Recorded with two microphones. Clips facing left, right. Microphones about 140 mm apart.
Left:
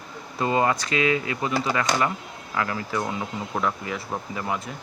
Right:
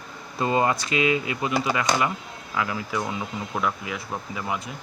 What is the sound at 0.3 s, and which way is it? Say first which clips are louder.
Speech: even; 20° left (ahead or behind).